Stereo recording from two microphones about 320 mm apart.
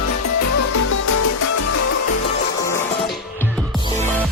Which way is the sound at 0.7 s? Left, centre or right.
Left.